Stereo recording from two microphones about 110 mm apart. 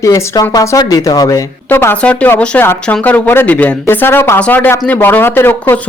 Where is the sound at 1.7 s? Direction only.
20° left (ahead or behind).